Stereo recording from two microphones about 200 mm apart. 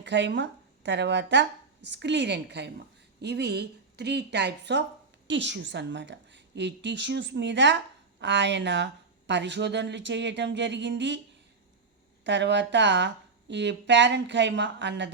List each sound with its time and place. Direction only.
0.0 s speech: 60° right (ahead or behind)
12.2 s speech: 60° right (ahead or behind)